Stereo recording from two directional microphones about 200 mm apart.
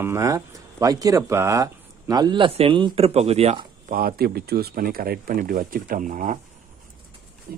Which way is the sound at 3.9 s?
50° right (ahead or behind).